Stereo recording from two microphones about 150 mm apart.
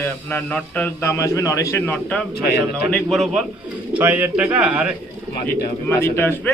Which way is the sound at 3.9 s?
10° right (ahead or behind).